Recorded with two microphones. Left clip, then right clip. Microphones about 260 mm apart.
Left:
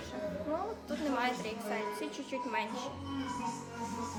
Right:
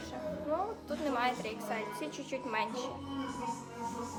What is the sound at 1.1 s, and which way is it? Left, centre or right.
A woman's voice, centre.